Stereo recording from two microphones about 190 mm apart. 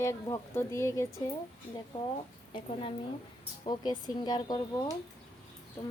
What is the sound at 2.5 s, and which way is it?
A woman's voice, 30° left (ahead or behind).